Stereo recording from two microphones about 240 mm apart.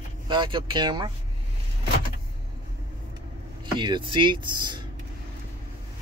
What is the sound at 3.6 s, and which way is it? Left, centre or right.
Speech, centre.